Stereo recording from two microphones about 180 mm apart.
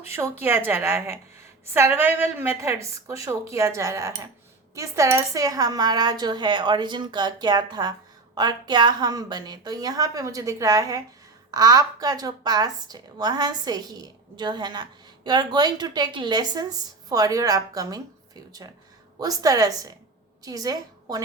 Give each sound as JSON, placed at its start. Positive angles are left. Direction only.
{"t": 0.1, "sound": "a woman's voice", "side_deg": -15}
{"t": 19.2, "sound": "a woman's voice", "side_deg": -20}